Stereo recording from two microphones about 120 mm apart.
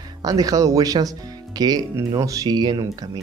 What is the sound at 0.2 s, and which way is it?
Speech, 30° right (ahead or behind).